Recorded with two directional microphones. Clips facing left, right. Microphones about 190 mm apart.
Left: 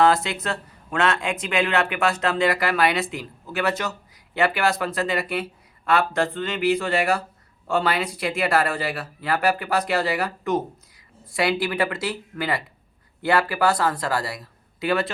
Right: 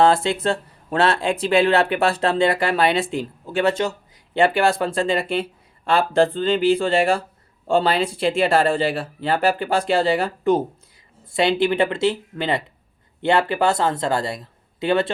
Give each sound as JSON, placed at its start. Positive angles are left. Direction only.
{"t": 0.0, "sound": "speech", "side_deg": -30}